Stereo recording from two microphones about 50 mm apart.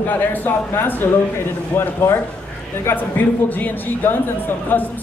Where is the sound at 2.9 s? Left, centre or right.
Left.